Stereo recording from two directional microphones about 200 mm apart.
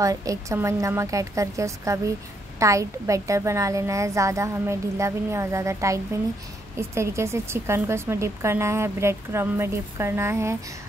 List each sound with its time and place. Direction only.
0.0 s speech: 15° right (ahead or behind)